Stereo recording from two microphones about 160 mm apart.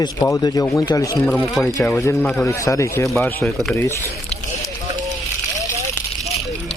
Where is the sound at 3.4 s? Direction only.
Centre (ahead or behind).